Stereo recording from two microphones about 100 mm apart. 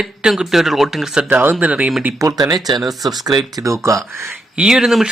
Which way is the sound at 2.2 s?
40° right (ahead or behind).